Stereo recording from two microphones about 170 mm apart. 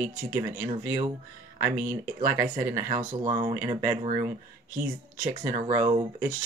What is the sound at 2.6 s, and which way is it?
Speech, 15° right (ahead or behind).